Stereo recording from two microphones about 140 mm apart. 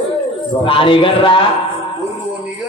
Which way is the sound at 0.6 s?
40° left (ahead or behind).